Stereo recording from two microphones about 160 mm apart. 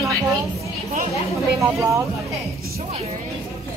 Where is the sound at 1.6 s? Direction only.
20° right (ahead or behind).